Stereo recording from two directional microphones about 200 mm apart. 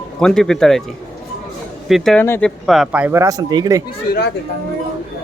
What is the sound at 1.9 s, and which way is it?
Speech, 5° left (ahead or behind).